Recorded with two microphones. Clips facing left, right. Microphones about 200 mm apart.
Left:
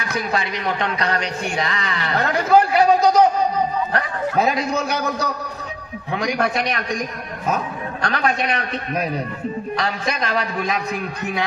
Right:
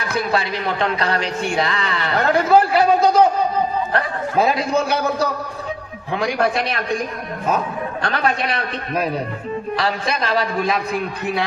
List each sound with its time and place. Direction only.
0.0 s speech: 30° right (ahead or behind)
2.2 s a sound: 35° right (ahead or behind)
3.9 s speech: 30° right (ahead or behind)
8.0 s speech: 35° right (ahead or behind)